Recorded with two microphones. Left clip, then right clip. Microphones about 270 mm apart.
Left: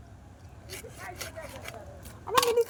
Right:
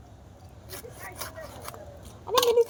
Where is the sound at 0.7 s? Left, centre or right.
Centre.